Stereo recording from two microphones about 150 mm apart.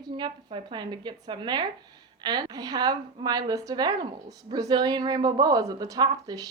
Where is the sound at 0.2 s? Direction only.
30° right (ahead or behind).